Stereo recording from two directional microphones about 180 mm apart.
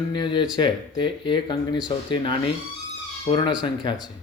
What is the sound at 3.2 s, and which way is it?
Speech, 25° left (ahead or behind).